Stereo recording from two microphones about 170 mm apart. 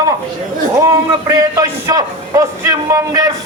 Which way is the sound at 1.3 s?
20° right (ahead or behind).